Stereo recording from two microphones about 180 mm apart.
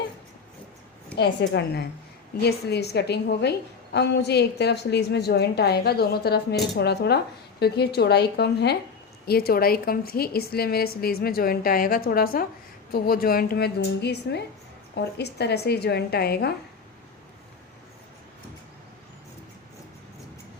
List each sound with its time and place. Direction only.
1.1 s a woman's voice: 65° left (ahead or behind)